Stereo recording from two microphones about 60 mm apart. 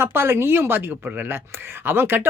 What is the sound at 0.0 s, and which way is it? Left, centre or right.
A woman's voice, right.